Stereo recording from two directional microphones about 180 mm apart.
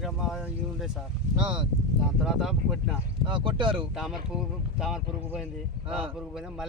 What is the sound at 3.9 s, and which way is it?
Speech, 5° right (ahead or behind).